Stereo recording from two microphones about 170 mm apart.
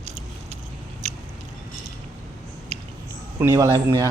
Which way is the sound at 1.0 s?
40° right (ahead or behind).